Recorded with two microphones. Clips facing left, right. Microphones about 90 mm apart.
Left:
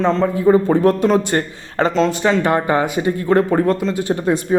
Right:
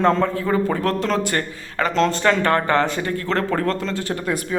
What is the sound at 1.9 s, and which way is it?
Speech, 5° left (ahead or behind).